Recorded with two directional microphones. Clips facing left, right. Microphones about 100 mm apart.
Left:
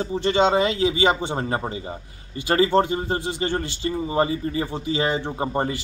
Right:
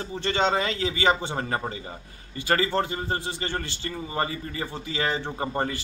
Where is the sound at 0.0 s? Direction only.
20° left (ahead or behind).